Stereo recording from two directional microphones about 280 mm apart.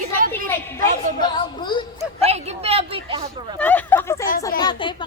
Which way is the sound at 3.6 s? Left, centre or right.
Centre.